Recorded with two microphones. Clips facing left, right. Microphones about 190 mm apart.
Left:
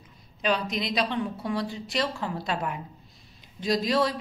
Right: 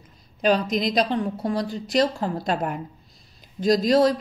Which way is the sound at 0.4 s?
40° right (ahead or behind).